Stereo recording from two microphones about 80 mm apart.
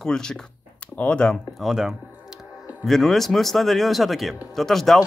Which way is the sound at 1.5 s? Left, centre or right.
Centre.